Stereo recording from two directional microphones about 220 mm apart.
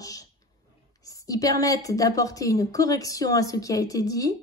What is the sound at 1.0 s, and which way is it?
A woman's voice, 15° left (ahead or behind).